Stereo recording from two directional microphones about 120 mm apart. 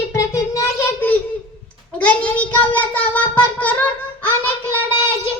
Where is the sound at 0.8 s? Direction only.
15° left (ahead or behind).